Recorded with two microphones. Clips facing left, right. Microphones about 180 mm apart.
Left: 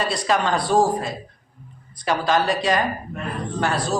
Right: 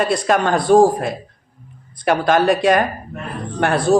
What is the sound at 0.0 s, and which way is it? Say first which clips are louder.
A man's voice: right 5 dB; 50° right (ahead or behind).